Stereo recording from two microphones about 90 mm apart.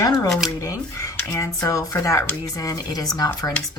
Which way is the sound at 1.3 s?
35° left (ahead or behind).